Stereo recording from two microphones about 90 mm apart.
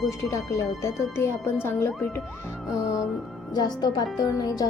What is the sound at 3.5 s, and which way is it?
A woman's voice, 50° left (ahead or behind).